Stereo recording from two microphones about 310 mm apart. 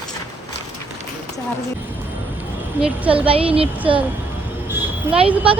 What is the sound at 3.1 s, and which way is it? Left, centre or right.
Speech, centre.